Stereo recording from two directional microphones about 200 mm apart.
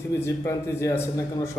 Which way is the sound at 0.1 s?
15° left (ahead or behind).